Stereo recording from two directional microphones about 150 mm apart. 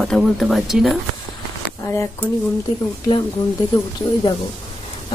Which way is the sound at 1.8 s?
15° left (ahead or behind).